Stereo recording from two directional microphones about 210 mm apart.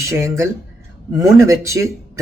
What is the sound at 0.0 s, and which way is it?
Speech, 15° right (ahead or behind).